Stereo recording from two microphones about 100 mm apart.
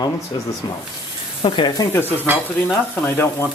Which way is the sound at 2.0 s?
20° right (ahead or behind).